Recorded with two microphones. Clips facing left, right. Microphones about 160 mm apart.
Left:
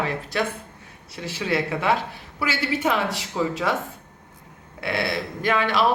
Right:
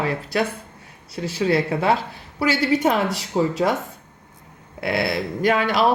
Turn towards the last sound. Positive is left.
turn(degrees=-40)  # may be behind; listen again after turning